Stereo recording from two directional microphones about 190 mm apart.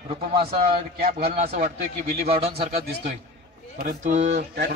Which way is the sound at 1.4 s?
35° right (ahead or behind).